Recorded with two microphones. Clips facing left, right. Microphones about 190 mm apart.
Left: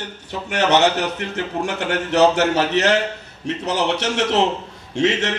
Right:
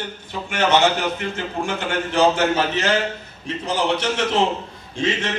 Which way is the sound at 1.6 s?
70° left (ahead or behind).